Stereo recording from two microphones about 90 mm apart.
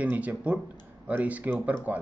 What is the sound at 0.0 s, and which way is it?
Speech, 15° right (ahead or behind).